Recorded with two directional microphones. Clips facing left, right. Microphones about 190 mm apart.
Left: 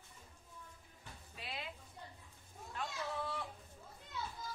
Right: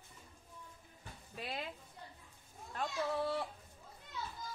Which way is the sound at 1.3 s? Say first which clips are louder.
Right 5 dB; 45° right (ahead or behind).